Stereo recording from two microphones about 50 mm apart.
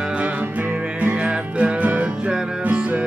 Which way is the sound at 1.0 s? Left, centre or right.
Right.